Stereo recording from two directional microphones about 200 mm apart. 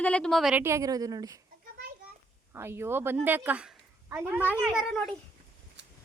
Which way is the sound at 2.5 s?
10° right (ahead or behind).